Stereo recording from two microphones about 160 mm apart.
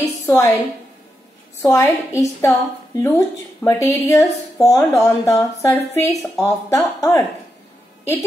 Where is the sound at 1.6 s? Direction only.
20° left (ahead or behind).